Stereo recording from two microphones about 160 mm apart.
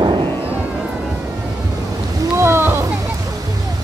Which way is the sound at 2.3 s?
15° right (ahead or behind).